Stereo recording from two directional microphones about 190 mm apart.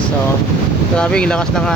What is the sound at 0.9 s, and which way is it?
Speech, 5° left (ahead or behind).